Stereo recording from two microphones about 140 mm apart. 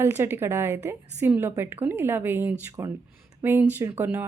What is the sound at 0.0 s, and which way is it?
A woman's voice, 15° right (ahead or behind).